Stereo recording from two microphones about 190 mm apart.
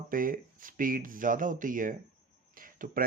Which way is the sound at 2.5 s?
45° right (ahead or behind).